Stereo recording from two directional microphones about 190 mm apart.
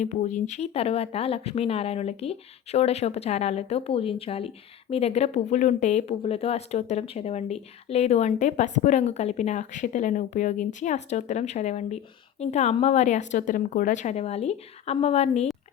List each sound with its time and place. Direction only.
0.0 s speech: 40° left (ahead or behind)